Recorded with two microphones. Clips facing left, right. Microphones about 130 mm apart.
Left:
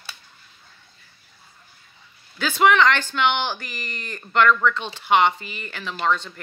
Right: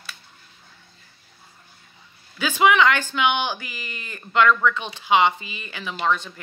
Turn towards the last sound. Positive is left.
turn(degrees=-10)  # may be behind; listen again after turning